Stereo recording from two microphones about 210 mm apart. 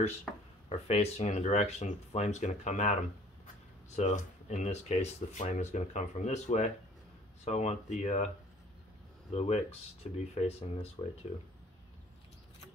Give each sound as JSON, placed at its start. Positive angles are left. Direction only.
{"t": 0.3, "sound": "a sound", "side_deg": 5}
{"t": 0.7, "sound": "speech", "side_deg": 30}
{"t": 9.3, "sound": "speech", "side_deg": 30}